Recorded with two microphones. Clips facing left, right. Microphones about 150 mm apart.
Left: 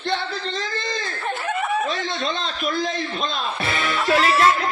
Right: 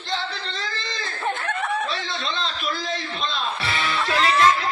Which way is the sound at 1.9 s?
45° left (ahead or behind).